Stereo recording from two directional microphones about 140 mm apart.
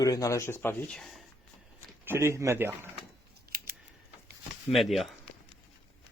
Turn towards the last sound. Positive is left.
turn(degrees=0)  # may be behind; listen again after turning